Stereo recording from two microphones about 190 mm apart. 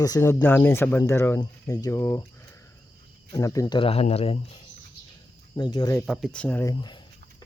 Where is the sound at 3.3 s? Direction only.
15° left (ahead or behind); by 4.4 s 30° left (ahead or behind).